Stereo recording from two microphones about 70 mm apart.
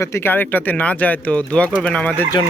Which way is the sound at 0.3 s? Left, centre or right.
Left.